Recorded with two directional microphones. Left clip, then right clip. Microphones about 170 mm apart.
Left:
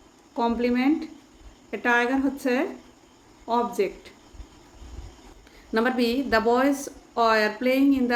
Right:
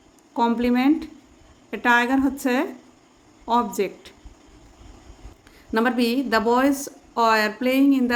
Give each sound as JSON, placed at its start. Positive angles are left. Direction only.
{"t": 0.3, "sound": "a woman's voice", "side_deg": -45}
{"t": 5.7, "sound": "a woman's voice", "side_deg": -40}